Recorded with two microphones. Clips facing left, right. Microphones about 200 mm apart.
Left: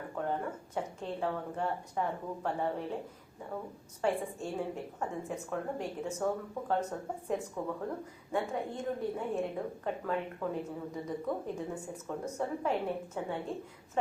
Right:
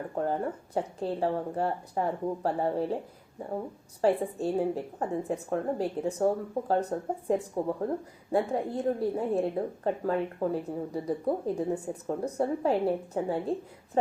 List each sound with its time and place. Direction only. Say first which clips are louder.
0.2 s a woman's voice: right 5 dB; 35° right (ahead or behind)
4.0 s a woman's voice: right 7 dB; 35° right (ahead or behind)